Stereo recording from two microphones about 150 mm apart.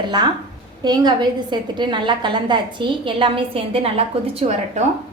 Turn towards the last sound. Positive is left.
turn(degrees=-45)  # may be behind; listen again after turning